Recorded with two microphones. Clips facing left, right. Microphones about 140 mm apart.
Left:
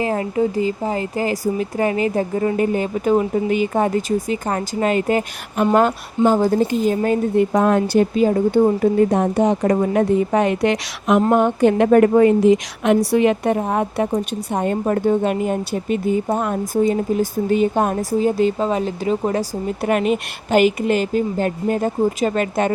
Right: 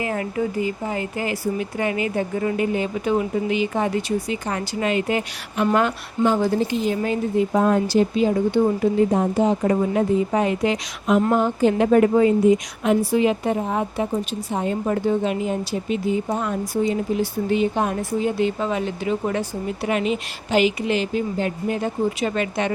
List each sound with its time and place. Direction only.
0.0 s speech: 30° left (ahead or behind)
7.5 s a woman's voice: 70° left (ahead or behind)
8.1 s speech: 45° left (ahead or behind)
9.1 s a woman's voice: 70° left (ahead or behind)
9.6 s a woman's voice: 60° left (ahead or behind)
11.3 s a woman's voice: 60° left (ahead or behind)
12.4 s a woman's voice: 80° left; by 22.7 s 45° left (ahead or behind)